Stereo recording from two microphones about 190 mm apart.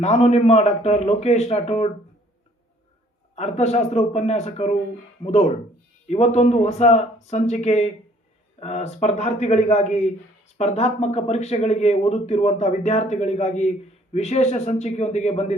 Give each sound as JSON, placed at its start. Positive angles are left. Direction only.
{"t": 0.0, "sound": "speech", "side_deg": 35}
{"t": 3.3, "sound": "speech", "side_deg": 35}